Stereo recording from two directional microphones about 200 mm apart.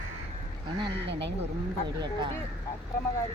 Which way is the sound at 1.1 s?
60° right (ahead or behind).